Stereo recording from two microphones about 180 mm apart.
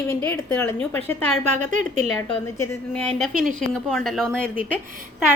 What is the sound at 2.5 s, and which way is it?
A woman's voice, 10° left (ahead or behind).